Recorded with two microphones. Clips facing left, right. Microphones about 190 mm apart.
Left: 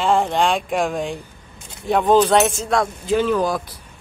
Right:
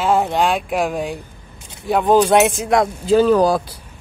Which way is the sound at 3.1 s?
40° right (ahead or behind).